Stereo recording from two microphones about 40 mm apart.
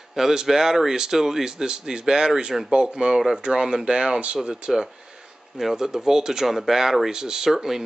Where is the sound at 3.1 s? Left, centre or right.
Centre; by 4.3 s right.